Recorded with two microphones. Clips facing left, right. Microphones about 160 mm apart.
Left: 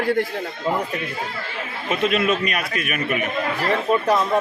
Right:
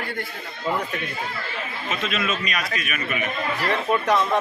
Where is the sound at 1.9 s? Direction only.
55° left (ahead or behind).